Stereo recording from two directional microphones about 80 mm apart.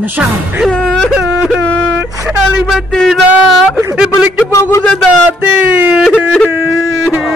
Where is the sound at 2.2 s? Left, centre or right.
Centre.